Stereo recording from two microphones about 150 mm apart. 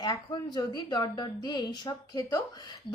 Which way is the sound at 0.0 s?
25° left (ahead or behind).